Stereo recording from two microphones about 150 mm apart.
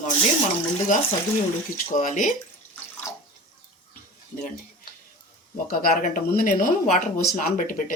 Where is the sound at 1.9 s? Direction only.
55° left (ahead or behind).